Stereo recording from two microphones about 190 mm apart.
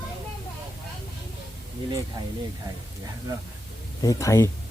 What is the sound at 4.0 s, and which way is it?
Speech, 15° left (ahead or behind).